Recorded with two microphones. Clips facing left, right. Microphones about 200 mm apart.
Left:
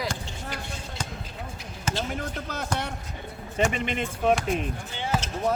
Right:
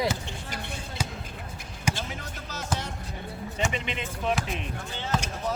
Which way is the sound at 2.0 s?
55° left (ahead or behind).